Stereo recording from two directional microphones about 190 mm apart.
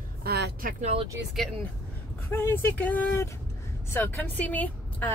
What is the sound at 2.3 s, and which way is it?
A woman's voice, 10° left (ahead or behind).